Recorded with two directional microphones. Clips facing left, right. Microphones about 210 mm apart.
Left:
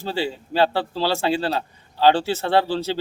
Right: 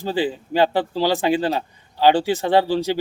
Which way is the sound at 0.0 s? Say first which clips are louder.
Right 3 dB; 15° right (ahead or behind).